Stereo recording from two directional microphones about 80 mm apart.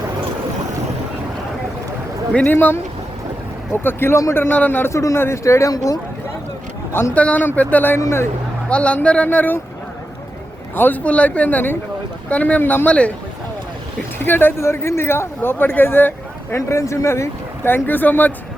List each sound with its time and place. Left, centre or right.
2.5 s speech: left
4.9 s speech: left
5.7 s speech: left
7.1 s speech: centre
10.8 s speech: left
14.3 s speech: left
16.6 s speech: left